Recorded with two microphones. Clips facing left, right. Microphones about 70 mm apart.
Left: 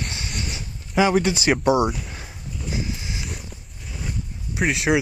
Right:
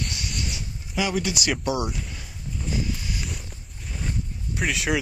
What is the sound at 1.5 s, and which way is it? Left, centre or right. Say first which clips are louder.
Speech: left 8 dB; left.